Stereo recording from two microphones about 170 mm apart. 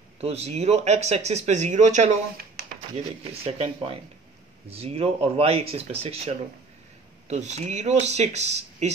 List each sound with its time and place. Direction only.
0.2 s speech: 40° right (ahead or behind)
3.4 s speech: 35° right (ahead or behind)